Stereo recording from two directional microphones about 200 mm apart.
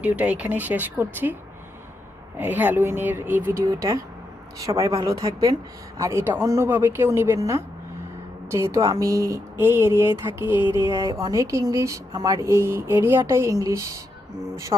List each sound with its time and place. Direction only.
0.0 s speech: 5° right (ahead or behind)
2.4 s a man's voice: 10° right (ahead or behind); by 14.9 s 25° right (ahead or behind)